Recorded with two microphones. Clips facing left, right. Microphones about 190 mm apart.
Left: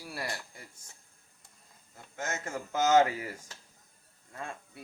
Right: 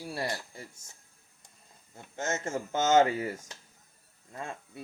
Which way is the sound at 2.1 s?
25° right (ahead or behind).